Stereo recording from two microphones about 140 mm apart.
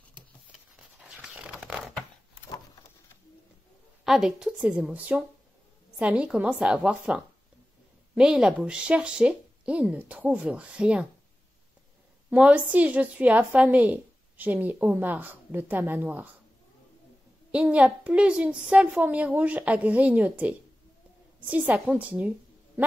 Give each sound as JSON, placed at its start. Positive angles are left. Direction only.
{"t": 0.5, "sound": "patter", "side_deg": -5}
{"t": 4.0, "sound": "a woman's voice", "side_deg": -5}
{"t": 12.3, "sound": "a woman's voice", "side_deg": -10}
{"t": 17.5, "sound": "a woman's voice", "side_deg": -10}